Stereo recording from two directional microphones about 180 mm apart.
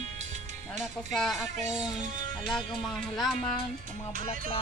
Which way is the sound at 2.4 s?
Centre (ahead or behind).